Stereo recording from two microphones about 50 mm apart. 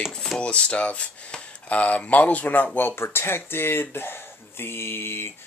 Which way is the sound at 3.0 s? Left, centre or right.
Left.